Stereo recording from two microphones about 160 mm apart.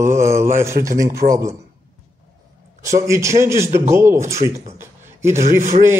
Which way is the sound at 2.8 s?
20° right (ahead or behind).